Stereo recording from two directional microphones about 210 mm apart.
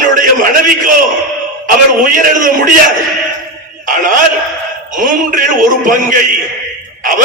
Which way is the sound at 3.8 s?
40° right (ahead or behind).